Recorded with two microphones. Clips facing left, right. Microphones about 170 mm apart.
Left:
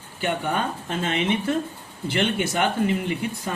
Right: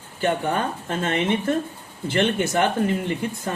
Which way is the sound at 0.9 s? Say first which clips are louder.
Right 2 dB; 50° right (ahead or behind).